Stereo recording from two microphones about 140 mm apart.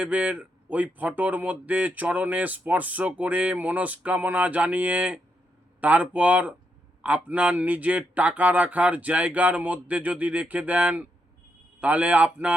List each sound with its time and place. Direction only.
0.0 s speech: 10° right (ahead or behind)